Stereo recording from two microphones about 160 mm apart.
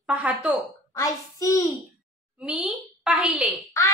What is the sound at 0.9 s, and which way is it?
Speech, 20° left (ahead or behind).